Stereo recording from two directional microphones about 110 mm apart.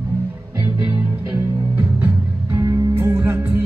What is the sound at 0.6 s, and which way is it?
Music, 25° right (ahead or behind).